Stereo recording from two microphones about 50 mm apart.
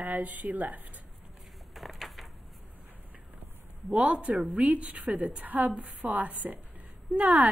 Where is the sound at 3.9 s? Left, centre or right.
Right.